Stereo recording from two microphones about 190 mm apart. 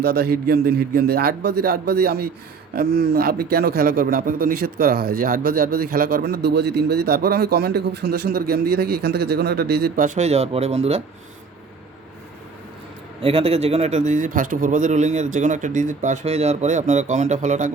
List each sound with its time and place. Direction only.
0.0 s a man's voice: 55° right (ahead or behind); by 11.0 s 35° right (ahead or behind)
13.2 s a man's voice: 30° right (ahead or behind)